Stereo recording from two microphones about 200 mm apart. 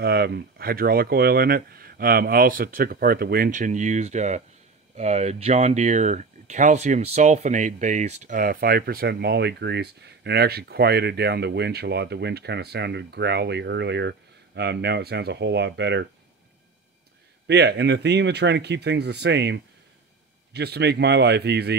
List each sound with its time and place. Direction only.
0.0 s speech: 50° right (ahead or behind)
17.5 s speech: 55° right (ahead or behind)